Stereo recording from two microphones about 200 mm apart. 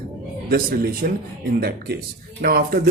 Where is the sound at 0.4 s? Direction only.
50° right (ahead or behind).